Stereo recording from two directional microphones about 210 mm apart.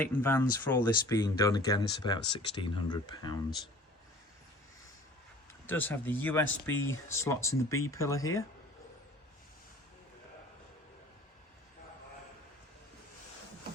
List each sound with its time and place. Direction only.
0.0 s speech: 10° left (ahead or behind)
5.6 s speech: 10° left (ahead or behind)